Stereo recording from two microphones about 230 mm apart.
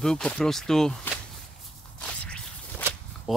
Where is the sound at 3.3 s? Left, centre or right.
Centre.